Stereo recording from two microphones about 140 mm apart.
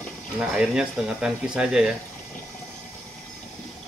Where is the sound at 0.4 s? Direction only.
5° right (ahead or behind).